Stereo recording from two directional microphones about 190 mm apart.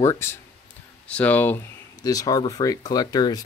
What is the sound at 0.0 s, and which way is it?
Speech, 15° left (ahead or behind).